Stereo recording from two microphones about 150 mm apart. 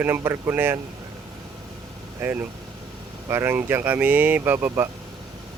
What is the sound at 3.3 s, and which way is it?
Speech, 15° right (ahead or behind).